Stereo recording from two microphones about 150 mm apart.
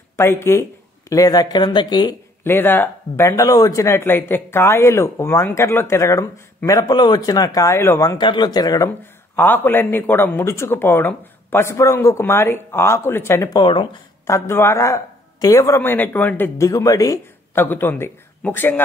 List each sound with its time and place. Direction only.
0.1 s speech: 15° left (ahead or behind)
2.4 s speech: 15° left (ahead or behind)
13.6 s speech: 35° left (ahead or behind)
14.2 s speech: 20° left (ahead or behind)